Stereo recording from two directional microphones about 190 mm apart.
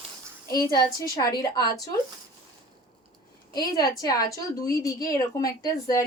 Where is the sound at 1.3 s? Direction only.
20° left (ahead or behind).